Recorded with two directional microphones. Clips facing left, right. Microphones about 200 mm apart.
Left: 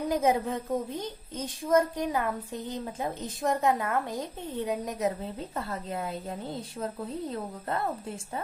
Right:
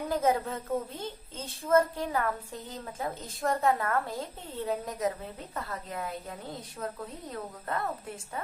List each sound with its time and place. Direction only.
0.1 s a woman's voice: 15° left (ahead or behind)